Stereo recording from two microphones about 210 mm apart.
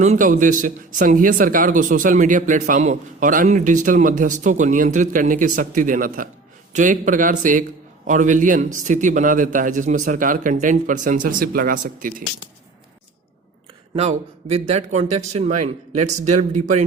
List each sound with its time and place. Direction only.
0.0 s speech: 35° right (ahead or behind)
13.9 s speech: 30° right (ahead or behind)